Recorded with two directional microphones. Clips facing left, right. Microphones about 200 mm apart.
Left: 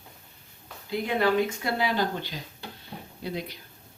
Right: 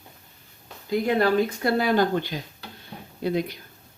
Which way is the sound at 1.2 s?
45° right (ahead or behind).